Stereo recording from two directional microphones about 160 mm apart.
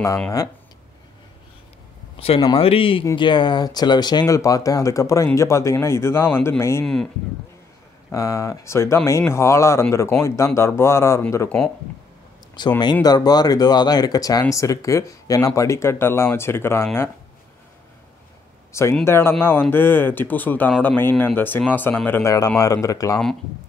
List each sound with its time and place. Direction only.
2.1 s speech: 35° left (ahead or behind); by 6.9 s 15° left (ahead or behind)
8.1 s speech: 20° left (ahead or behind)
12.5 s speech: 25° left (ahead or behind)
18.7 s speech: 15° left (ahead or behind)